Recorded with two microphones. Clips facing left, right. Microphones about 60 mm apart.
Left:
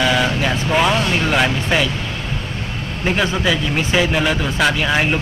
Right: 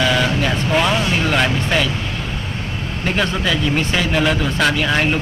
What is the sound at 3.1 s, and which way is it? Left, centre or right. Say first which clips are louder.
A man's voice: left 2 dB; centre.